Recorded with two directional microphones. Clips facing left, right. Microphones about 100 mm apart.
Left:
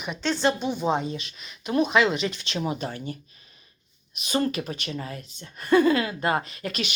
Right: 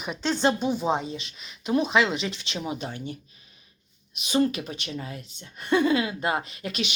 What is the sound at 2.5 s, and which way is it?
Speech, centre (ahead or behind).